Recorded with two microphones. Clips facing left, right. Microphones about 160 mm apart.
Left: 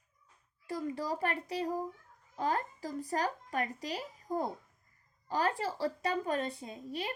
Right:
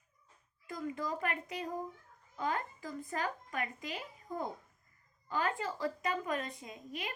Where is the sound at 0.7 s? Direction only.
35° left (ahead or behind).